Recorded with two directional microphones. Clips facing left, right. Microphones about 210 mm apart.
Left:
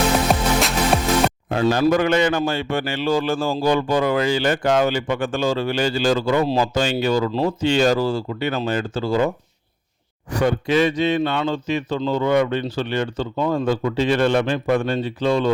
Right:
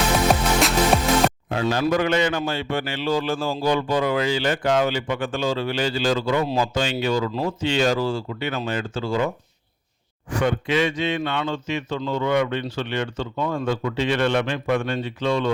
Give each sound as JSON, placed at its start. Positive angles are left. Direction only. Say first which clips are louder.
{"t": 1.5, "sound": "a man's voice", "louder": "left 4 dB", "side_deg": 45}
{"t": 10.3, "sound": "a man's voice", "louder": "left 3 dB", "side_deg": 40}